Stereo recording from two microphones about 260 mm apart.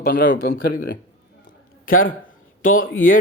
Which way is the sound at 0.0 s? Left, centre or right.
Left.